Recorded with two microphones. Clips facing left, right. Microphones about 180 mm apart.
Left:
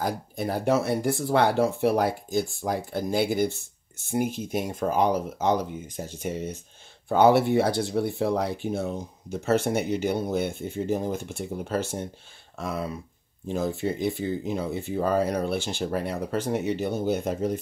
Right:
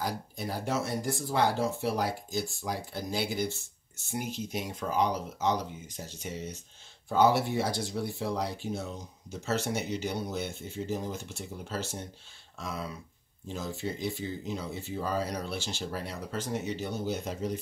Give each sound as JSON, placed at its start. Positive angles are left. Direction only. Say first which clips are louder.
{"t": 0.0, "sound": "speech", "louder": "left 6 dB", "side_deg": 55}